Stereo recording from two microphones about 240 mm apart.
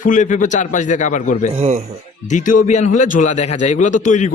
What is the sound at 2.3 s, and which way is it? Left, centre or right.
Speech, left.